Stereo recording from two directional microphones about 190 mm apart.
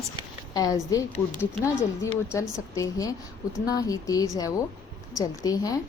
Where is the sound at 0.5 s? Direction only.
20° left (ahead or behind).